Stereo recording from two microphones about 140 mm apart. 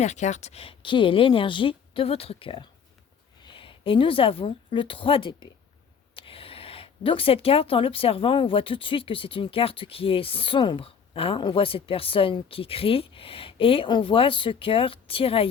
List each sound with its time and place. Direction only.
0.0 s a woman's voice: 55° left (ahead or behind)